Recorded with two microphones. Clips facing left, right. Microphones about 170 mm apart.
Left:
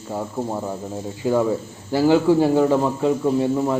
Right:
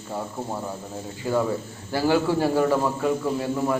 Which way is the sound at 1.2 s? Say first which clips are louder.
Left 4 dB; 15° left (ahead or behind).